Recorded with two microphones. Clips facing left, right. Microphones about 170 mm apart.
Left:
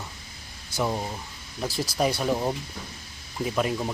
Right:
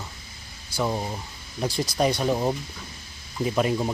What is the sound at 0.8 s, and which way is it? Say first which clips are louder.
Speech: right 1 dB; 5° right (ahead or behind).